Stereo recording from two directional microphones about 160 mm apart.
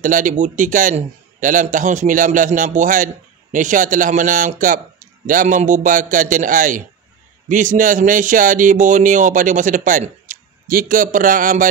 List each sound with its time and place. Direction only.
0.0 s a man's voice: 55° right (ahead or behind)